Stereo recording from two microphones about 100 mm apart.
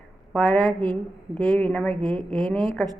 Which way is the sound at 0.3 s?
10° left (ahead or behind).